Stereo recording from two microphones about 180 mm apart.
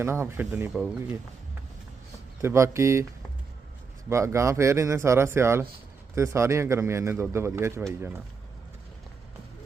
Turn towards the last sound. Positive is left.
turn(degrees=-15)  # may be behind; listen again after turning